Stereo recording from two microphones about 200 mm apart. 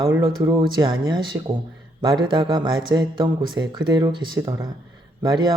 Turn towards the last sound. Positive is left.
turn(degrees=-20)  # may be behind; listen again after turning